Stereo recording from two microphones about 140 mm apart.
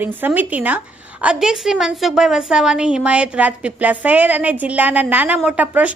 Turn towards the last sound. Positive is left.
turn(degrees=-10)  # may be behind; listen again after turning